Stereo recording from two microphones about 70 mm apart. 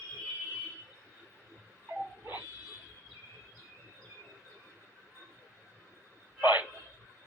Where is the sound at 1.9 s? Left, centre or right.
Right.